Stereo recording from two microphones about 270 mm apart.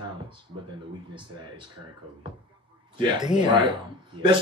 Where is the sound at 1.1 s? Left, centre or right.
Centre.